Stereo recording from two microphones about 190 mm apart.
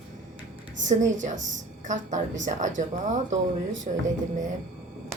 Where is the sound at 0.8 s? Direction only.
75° right (ahead or behind).